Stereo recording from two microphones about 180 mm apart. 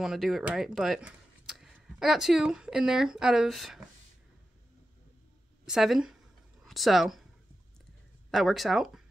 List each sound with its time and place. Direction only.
0.0 s speech: centre (ahead or behind)
5.7 s speech: 5° right (ahead or behind)
8.3 s speech: centre (ahead or behind)